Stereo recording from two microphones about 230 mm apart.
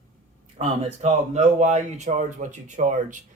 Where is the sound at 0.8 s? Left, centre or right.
Right.